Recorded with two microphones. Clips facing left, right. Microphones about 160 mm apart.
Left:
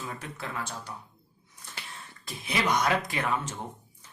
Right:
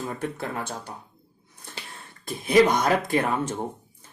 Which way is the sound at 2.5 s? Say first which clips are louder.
Right 8 dB; 45° right (ahead or behind).